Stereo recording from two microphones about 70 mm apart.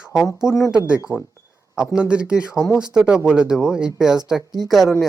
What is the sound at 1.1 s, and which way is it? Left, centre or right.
Speech, right.